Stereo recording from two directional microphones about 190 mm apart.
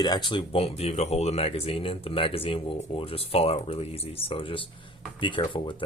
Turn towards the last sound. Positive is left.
turn(degrees=25)  # may be behind; listen again after turning